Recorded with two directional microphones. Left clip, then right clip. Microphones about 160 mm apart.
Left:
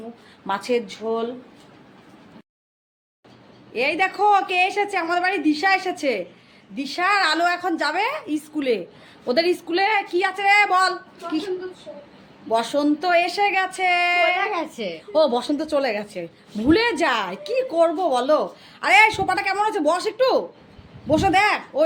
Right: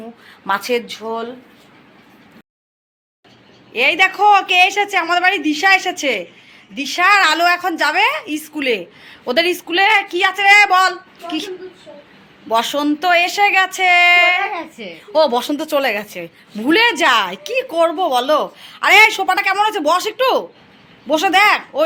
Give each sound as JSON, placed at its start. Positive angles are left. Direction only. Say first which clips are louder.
{"t": 0.4, "sound": "a woman's voice", "louder": "right 5 dB", "side_deg": -5}
{"t": 3.7, "sound": "a woman's voice", "louder": "right 7 dB", "side_deg": -5}
{"t": 14.5, "sound": "a woman's voice", "louder": "even", "side_deg": 80}
{"t": 15.1, "sound": "a woman's voice", "louder": "right 5 dB", "side_deg": 5}